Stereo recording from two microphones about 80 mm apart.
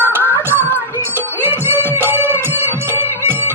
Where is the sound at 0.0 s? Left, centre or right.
Right.